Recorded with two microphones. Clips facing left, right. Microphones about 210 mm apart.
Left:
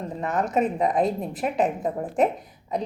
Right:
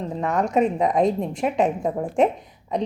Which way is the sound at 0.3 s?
Centre (ahead or behind).